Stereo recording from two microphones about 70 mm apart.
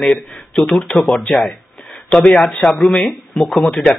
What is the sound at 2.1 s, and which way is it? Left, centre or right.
Speech, centre.